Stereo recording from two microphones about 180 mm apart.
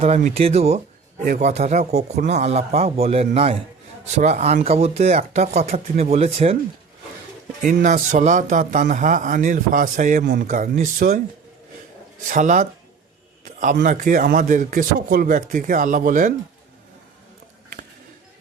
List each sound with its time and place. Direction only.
0.0 s speech: 40° right (ahead or behind)
7.7 s a man's voice: 45° right (ahead or behind)
12.3 s a man's voice: 45° right (ahead or behind)
13.4 s a sound: 45° right (ahead or behind)
13.8 s a man's voice: 45° right (ahead or behind)